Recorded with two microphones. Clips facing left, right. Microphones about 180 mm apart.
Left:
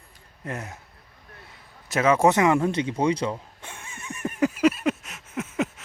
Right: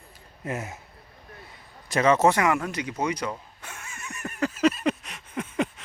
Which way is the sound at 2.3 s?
25° left (ahead or behind).